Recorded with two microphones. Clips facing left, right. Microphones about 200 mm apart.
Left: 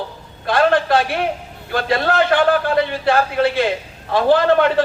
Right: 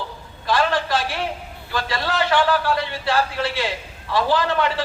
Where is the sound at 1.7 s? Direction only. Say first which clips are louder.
Left 7 dB; 55° left (ahead or behind).